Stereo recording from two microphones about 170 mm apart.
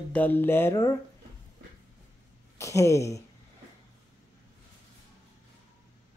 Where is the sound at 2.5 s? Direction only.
15° left (ahead or behind).